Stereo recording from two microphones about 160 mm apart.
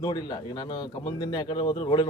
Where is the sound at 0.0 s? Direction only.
25° left (ahead or behind).